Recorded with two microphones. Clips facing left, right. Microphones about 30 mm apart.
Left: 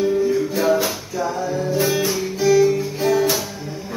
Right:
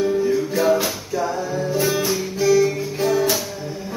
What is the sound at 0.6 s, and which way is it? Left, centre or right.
Music, centre.